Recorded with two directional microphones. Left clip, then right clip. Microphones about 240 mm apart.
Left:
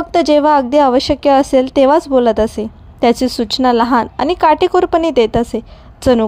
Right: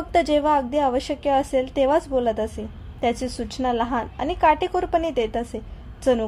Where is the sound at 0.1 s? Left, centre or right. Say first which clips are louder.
Left 8 dB; left.